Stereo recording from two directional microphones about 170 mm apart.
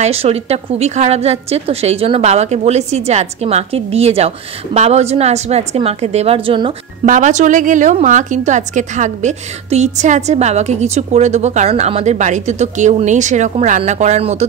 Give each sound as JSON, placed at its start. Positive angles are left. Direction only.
{"t": 0.0, "sound": "a woman's voice", "side_deg": -35}
{"t": 7.1, "sound": "a woman's voice", "side_deg": -45}